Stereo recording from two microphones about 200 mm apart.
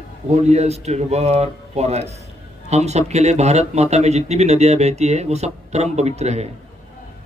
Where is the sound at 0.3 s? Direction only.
35° right (ahead or behind).